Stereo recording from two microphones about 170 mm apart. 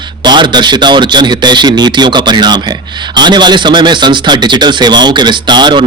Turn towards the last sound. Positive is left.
turn(degrees=-25)  # may be behind; listen again after turning